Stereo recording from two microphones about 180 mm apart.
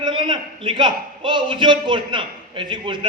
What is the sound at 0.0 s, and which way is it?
A man's voice, 25° right (ahead or behind).